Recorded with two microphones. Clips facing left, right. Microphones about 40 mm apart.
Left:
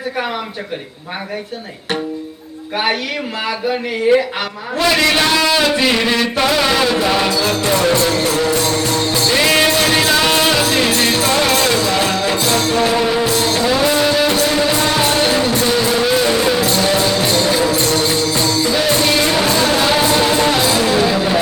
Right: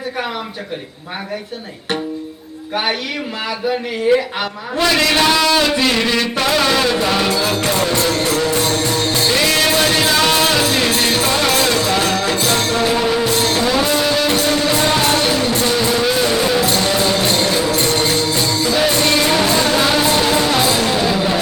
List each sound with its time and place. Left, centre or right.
2.7 s a man's voice: centre
9.0 s music: centre
9.6 s music: centre
17.1 s music: centre
17.7 s music: right
18.0 s music: centre
18.9 s music: centre